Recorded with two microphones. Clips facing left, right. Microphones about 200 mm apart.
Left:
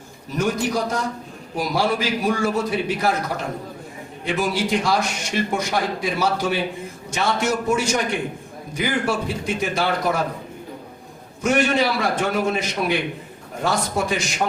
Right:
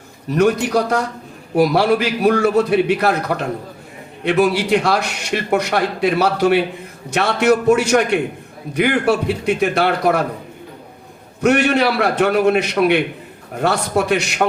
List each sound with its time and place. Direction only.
0.3 s a man's voice: 65° right (ahead or behind)
11.3 s a man's voice: 65° right (ahead or behind)